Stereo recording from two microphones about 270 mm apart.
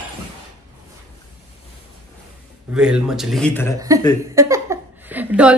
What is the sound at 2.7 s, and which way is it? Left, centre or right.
A woman's voice, centre.